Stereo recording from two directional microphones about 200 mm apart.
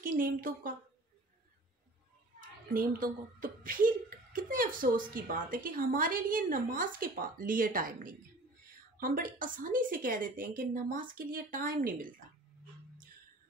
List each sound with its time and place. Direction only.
0.0 s a woman's voice: 45° right (ahead or behind)
2.7 s a child's voice: 45° right (ahead or behind)